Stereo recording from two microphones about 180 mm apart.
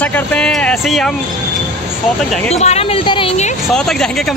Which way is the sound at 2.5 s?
35° left (ahead or behind).